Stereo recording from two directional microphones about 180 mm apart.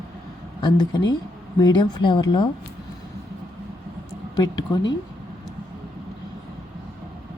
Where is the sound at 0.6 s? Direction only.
25° left (ahead or behind).